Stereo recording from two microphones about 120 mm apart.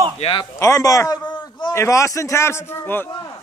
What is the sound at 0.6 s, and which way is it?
Speech, 25° left (ahead or behind).